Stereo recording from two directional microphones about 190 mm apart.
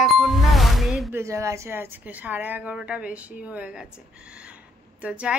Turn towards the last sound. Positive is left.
turn(degrees=-5)  # may be behind; listen again after turning